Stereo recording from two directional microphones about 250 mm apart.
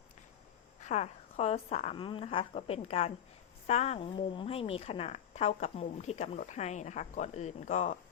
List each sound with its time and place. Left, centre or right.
0.9 s a woman's voice: left